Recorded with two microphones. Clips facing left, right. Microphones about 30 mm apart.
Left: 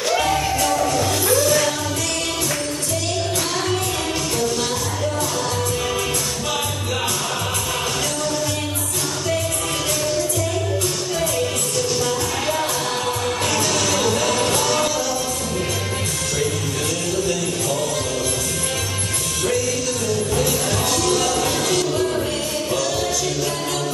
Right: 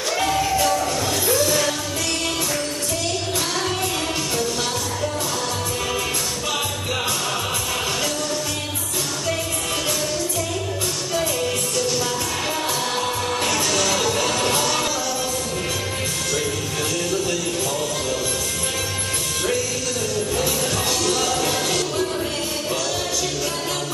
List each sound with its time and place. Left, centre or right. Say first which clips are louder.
0.1 s music: left 1 dB; centre
11.1 s music: right 1 dB; centre
13.5 s music: left 1 dB; centre
21.0 s music: left 2 dB; centre